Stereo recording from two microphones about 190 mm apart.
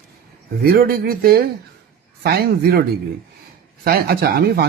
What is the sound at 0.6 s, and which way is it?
Speech, 55° right (ahead or behind).